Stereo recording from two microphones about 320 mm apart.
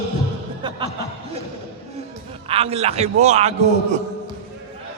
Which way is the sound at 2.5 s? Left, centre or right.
Centre.